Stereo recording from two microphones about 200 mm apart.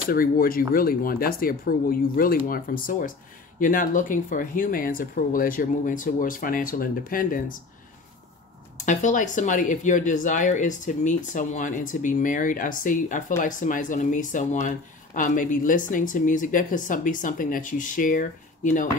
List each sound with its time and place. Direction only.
0.1 s speech: 45° left (ahead or behind)
8.7 s speech: 35° left (ahead or behind)